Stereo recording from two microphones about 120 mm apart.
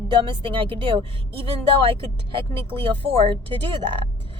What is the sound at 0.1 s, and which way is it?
A woman's voice, 45° right (ahead or behind).